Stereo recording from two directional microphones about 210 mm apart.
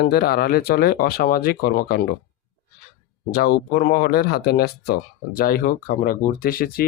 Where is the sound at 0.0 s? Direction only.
50° left (ahead or behind).